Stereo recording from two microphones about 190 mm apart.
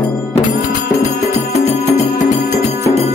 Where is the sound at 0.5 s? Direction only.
40° left (ahead or behind).